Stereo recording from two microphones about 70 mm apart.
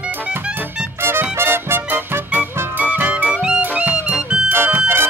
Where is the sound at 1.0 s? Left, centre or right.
Right.